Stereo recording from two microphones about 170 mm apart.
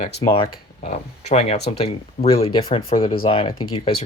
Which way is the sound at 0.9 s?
40° left (ahead or behind).